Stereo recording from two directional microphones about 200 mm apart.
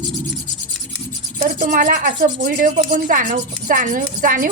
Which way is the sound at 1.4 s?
40° right (ahead or behind).